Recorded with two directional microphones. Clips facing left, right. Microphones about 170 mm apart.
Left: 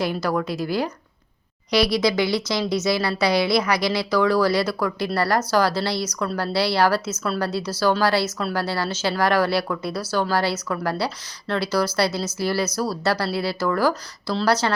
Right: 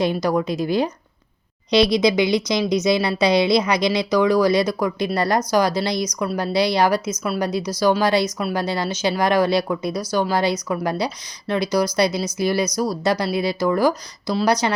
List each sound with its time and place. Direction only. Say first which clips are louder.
0.0 s a woman's voice: right 3 dB; 20° right (ahead or behind)